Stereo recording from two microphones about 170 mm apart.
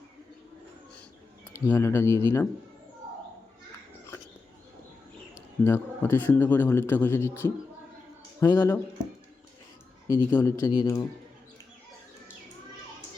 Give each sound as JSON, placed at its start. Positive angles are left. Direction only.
{"t": 1.5, "sound": "speech", "side_deg": 15}
{"t": 5.6, "sound": "speech", "side_deg": 15}
{"t": 10.3, "sound": "speech", "side_deg": 15}